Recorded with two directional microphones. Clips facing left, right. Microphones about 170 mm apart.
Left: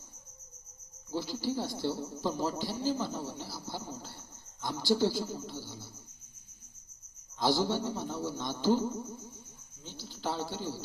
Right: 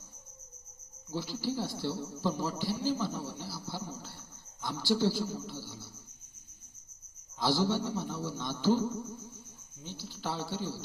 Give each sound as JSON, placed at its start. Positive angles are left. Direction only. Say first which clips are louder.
{"t": 1.1, "sound": "a man's voice", "louder": "left 1 dB", "side_deg": 15}
{"t": 7.4, "sound": "a man's voice", "louder": "even", "side_deg": 20}